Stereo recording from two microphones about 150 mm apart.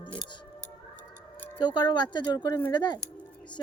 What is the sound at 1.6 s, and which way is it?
A woman's voice, 30° left (ahead or behind).